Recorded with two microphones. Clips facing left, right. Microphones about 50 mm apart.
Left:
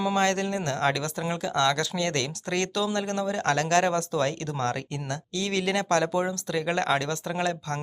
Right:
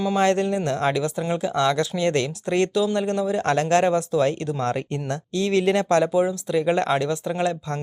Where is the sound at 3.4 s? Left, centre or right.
Right.